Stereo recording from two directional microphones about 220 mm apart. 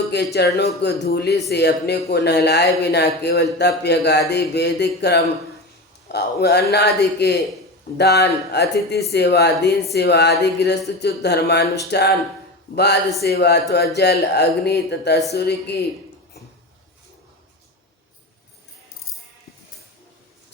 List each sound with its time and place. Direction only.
0.3 s speech: 50° left (ahead or behind)